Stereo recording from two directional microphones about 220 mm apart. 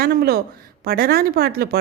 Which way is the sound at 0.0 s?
45° right (ahead or behind).